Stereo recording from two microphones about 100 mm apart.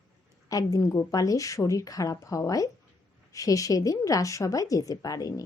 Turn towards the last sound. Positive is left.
turn(degrees=35)  # may be behind; listen again after turning